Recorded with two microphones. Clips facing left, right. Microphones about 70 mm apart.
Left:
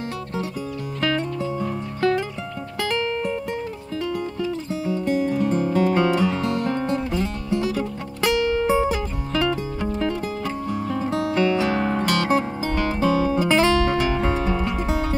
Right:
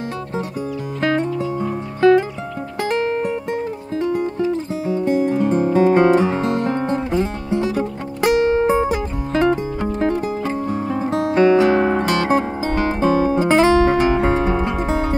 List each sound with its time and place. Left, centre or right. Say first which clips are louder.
1.6 s music: right 8 dB; right